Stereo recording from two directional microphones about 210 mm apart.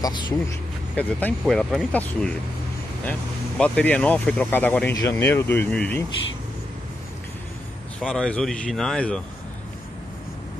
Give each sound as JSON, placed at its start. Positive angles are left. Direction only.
{"t": 0.0, "sound": "speech", "side_deg": 20}
{"t": 0.9, "sound": "speech", "side_deg": 5}
{"t": 8.0, "sound": "speech", "side_deg": 5}